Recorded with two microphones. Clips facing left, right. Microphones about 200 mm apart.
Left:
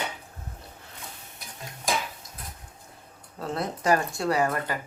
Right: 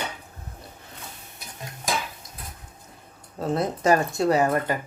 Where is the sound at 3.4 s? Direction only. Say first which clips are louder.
Right 5 dB; 20° right (ahead or behind).